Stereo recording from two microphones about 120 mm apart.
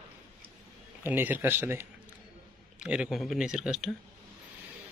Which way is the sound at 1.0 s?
15° right (ahead or behind).